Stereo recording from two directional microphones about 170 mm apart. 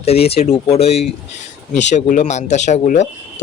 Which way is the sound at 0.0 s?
35° left (ahead or behind).